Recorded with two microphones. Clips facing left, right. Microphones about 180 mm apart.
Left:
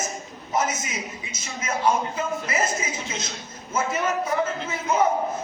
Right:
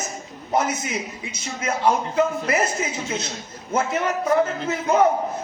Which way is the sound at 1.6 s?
65° right (ahead or behind).